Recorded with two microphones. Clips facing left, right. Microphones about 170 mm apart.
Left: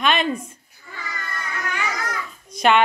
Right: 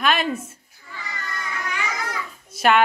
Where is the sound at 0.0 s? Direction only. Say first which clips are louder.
Left 1 dB; 5° right (ahead or behind).